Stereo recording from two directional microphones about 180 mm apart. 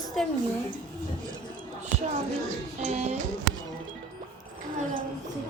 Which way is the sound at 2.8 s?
40° right (ahead or behind).